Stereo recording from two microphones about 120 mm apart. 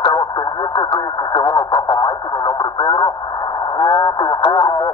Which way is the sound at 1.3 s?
35° left (ahead or behind).